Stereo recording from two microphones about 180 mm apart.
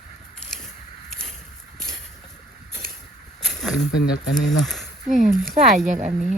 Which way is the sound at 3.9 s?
65° left (ahead or behind).